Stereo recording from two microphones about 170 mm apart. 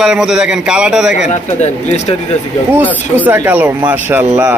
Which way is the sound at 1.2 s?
40° left (ahead or behind).